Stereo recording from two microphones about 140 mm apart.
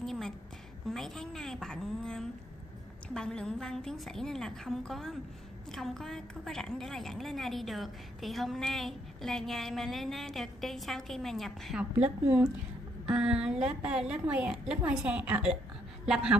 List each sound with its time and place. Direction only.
0.0 s a sound: 5° left (ahead or behind)
0.8 s a woman's voice: 5° left (ahead or behind)
13.0 s a woman's voice: 5° right (ahead or behind)